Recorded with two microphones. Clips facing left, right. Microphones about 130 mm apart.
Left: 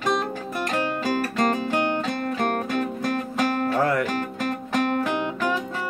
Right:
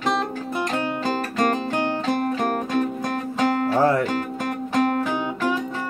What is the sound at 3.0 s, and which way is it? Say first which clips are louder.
Music: right 1 dB; 25° right (ahead or behind).